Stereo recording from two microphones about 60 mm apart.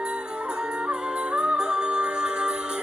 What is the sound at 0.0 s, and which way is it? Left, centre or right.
Music, centre.